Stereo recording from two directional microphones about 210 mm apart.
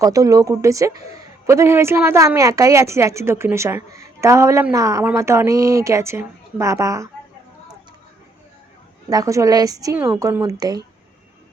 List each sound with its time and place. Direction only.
0.0 s speech: 15° right (ahead or behind)
9.0 s speech: 15° right (ahead or behind)